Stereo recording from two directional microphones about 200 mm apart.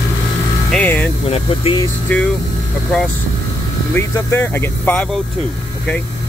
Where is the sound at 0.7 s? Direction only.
5° left (ahead or behind).